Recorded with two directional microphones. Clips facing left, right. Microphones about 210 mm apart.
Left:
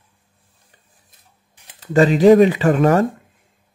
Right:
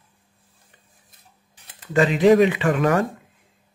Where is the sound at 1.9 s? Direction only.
40° left (ahead or behind).